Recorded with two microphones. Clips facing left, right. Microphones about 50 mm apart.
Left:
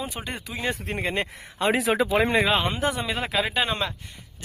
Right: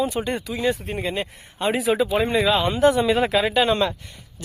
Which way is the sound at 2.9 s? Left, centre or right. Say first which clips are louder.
Right 7 dB; centre.